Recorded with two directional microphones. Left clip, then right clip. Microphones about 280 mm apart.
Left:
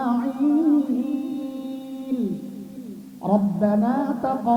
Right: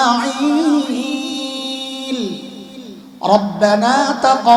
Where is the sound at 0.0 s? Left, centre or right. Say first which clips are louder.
Right 9 dB; centre.